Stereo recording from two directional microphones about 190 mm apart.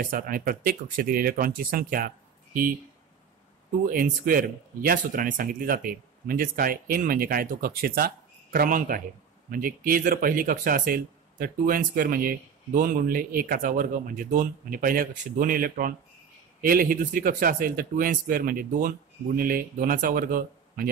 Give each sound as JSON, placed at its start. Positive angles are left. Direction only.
{"t": 0.0, "sound": "speech", "side_deg": -45}
{"t": 3.7, "sound": "speech", "side_deg": -45}